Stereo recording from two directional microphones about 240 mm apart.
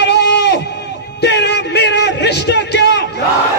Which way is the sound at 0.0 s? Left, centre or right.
Left.